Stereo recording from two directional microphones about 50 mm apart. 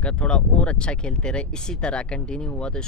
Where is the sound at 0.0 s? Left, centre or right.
Left.